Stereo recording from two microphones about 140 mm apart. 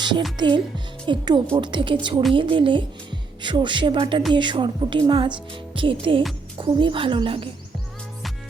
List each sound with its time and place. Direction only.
0.3 s a woman's voice: 35° right (ahead or behind)